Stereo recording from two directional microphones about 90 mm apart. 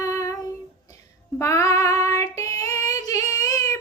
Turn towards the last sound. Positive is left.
turn(degrees=40)  # may be behind; listen again after turning